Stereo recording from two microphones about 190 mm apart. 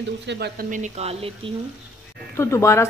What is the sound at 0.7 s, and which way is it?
Speech, 35° right (ahead or behind).